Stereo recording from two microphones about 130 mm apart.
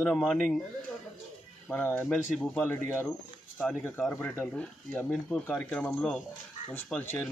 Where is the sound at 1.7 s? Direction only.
15° left (ahead or behind).